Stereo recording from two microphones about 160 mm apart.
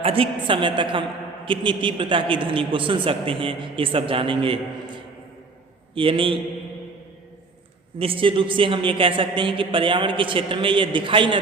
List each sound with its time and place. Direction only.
0.0 s a woman's voice: 35° right (ahead or behind)
5.9 s a man's voice: 35° right (ahead or behind)
7.9 s a man's voice: 35° right (ahead or behind)